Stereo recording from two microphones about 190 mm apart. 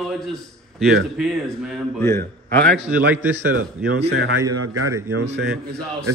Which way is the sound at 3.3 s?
65° right (ahead or behind).